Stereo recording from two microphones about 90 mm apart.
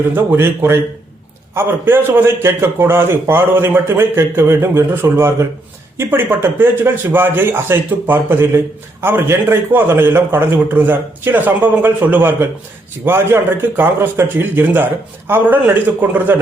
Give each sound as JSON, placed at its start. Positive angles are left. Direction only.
{"t": 0.1, "sound": "speech", "side_deg": -20}